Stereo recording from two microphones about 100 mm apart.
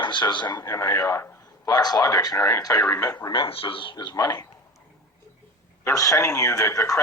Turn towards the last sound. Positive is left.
turn(degrees=30)  # may be behind; listen again after turning